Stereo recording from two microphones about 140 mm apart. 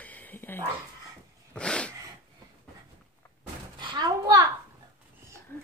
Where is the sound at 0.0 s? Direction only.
10° left (ahead or behind).